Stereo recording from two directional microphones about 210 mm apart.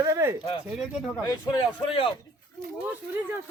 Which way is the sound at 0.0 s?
15° right (ahead or behind).